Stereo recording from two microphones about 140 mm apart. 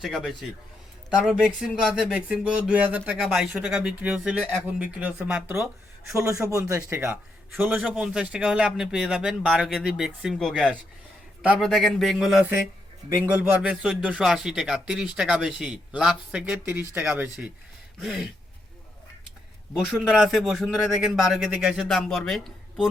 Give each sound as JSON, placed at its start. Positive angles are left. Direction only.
{"t": 0.0, "sound": "speech", "side_deg": 0}
{"t": 7.5, "sound": "speech", "side_deg": 0}
{"t": 20.0, "sound": "speech", "side_deg": 0}